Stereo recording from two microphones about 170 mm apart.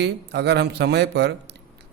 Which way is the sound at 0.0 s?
80° right.